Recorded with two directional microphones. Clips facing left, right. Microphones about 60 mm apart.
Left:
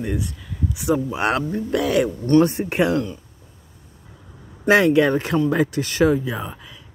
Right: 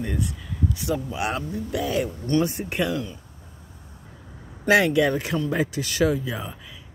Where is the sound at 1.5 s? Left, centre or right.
Left.